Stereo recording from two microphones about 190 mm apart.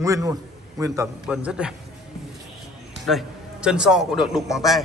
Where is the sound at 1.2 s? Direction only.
5° right (ahead or behind).